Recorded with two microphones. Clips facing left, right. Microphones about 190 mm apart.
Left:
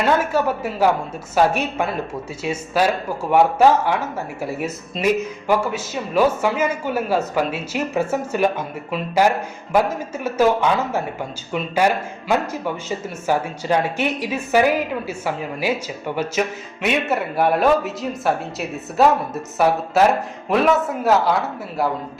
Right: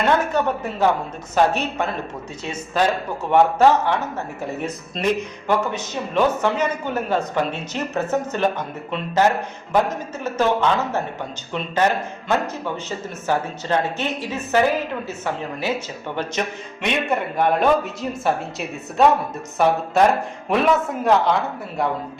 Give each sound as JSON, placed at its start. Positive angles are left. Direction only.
{"t": 0.0, "sound": "speech", "side_deg": 5}